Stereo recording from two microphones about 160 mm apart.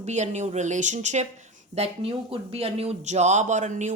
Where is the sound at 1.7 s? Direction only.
40° right (ahead or behind).